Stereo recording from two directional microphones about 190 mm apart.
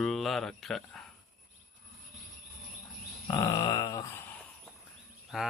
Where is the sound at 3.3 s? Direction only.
20° left (ahead or behind).